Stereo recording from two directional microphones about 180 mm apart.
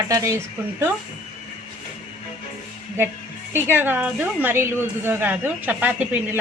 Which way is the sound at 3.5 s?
10° right (ahead or behind).